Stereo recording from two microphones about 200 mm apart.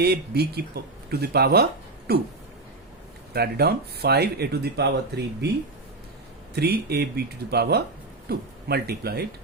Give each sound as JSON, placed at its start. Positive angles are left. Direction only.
{"t": 0.0, "sound": "speech", "side_deg": -50}
{"t": 3.3, "sound": "speech", "side_deg": -55}
{"t": 6.6, "sound": "speech", "side_deg": -50}